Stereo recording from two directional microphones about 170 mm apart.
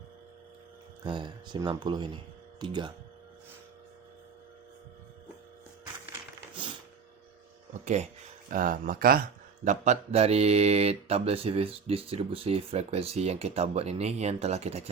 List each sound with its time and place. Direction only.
1.0 s speech: 25° right (ahead or behind)
7.7 s a sound: 45° right (ahead or behind)
8.4 s speech: 55° right (ahead or behind)
9.6 s speech: 45° right (ahead or behind)